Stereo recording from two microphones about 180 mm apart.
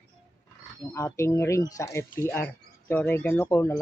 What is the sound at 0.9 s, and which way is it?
Speech, 15° left (ahead or behind).